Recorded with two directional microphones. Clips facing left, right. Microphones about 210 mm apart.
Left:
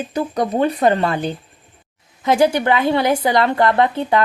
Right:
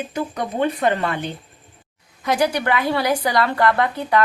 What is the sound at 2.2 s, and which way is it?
A woman's voice, 25° left (ahead or behind).